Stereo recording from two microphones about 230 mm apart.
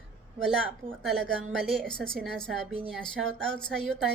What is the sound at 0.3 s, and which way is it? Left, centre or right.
A woman's voice, centre.